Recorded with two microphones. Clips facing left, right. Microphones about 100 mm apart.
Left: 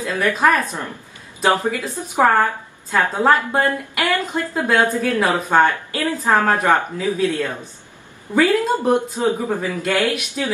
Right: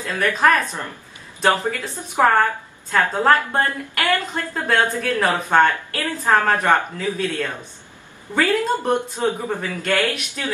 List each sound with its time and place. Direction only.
0.0 s speech: 15° left (ahead or behind)